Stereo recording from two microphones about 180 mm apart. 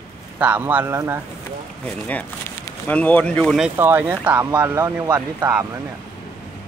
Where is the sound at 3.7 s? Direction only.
10° right (ahead or behind).